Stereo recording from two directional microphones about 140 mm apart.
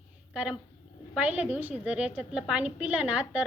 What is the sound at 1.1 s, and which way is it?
A woman's voice, 10° right (ahead or behind).